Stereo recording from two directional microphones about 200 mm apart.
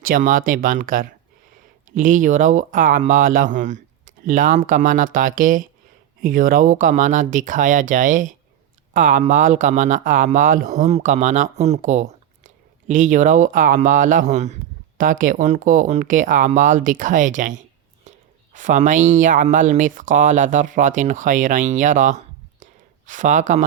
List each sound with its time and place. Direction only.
0.0 s speech: 45° right (ahead or behind)